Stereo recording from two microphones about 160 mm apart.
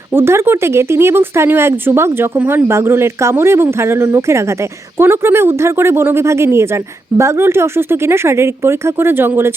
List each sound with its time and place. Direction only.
0.1 s speech: 15° right (ahead or behind)